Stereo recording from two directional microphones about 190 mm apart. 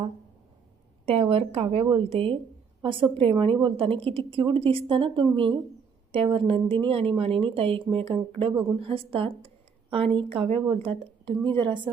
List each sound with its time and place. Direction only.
1.0 s speech: 30° right (ahead or behind)